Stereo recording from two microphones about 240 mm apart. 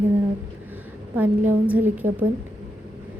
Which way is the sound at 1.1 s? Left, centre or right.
Centre.